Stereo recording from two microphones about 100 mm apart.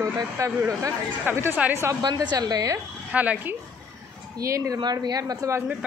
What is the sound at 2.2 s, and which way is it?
Speech, 40° right (ahead or behind).